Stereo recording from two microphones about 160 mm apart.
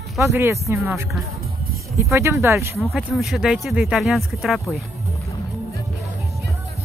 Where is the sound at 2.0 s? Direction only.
15° right (ahead or behind).